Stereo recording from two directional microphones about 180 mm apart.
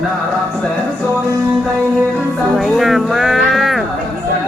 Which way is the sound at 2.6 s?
Centre (ahead or behind).